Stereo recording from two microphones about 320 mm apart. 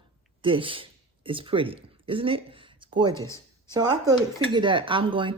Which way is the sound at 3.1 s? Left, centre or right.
Centre.